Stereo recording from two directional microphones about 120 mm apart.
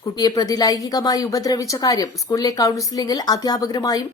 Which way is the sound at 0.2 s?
35° left (ahead or behind).